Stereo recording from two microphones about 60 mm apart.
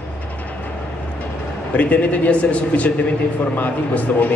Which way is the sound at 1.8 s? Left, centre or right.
Left.